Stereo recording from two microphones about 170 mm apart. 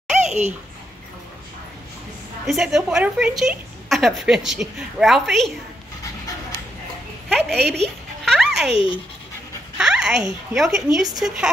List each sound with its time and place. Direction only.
0.1 s bathtub: 45° right (ahead or behind)
2.4 s a woman's voice: centre (ahead or behind)
7.2 s a sound: centre (ahead or behind)
10.5 s a woman's voice: centre (ahead or behind)